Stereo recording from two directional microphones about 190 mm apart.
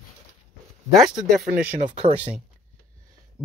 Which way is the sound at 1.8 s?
35° right (ahead or behind).